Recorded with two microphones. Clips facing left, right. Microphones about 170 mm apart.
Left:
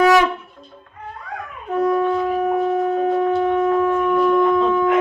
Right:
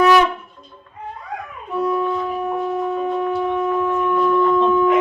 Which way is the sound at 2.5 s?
90° left.